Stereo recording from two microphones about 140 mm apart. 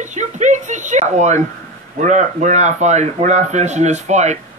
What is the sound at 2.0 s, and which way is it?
Speech, 60° right (ahead or behind).